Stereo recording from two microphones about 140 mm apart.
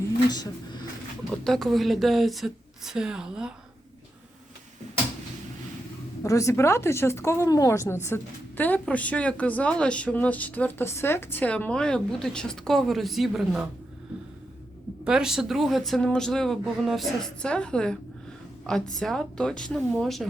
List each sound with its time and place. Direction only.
0.3 s speech: 30° left (ahead or behind)
1.3 s speech: 5° left (ahead or behind)
6.2 s a woman's voice: 20° left (ahead or behind); by 13.7 s 5° right (ahead or behind)
15.0 s speech: 5° right (ahead or behind)